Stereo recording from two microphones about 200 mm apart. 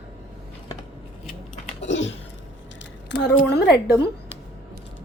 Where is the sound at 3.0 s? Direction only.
60° left (ahead or behind).